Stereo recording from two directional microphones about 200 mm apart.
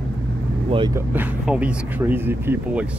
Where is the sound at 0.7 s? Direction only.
25° right (ahead or behind).